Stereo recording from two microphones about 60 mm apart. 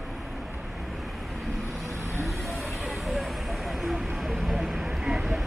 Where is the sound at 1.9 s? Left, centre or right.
Right.